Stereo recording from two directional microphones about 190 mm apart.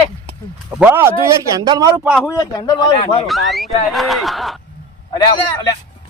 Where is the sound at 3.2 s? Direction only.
Centre (ahead or behind).